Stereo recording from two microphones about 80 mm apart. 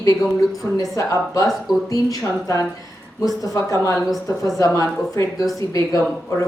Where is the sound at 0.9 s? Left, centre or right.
Left.